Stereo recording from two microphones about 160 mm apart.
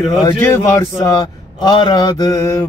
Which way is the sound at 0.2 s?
15° left (ahead or behind).